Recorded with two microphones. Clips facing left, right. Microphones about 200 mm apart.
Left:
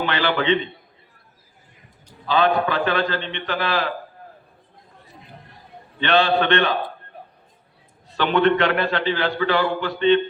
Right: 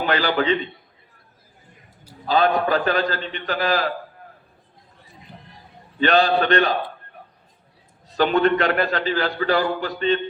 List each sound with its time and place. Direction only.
0.0 s a man's voice: 40° right (ahead or behind)
2.2 s a man's voice: 40° right (ahead or behind)
6.0 s a man's voice: 40° right (ahead or behind)
8.1 s a man's voice: 40° right (ahead or behind)